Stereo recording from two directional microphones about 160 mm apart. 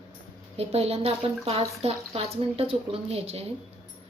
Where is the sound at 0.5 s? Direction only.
40° right (ahead or behind).